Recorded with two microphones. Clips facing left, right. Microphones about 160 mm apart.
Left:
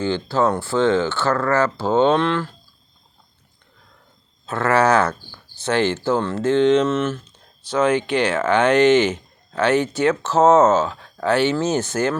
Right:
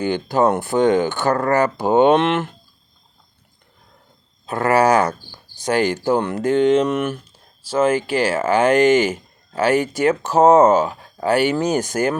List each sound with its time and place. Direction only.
0.0 s speech: 15° right (ahead or behind)
4.4 s speech: 10° right (ahead or behind)